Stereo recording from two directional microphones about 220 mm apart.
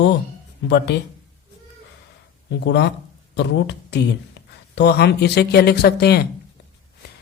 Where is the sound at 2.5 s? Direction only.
50° left (ahead or behind).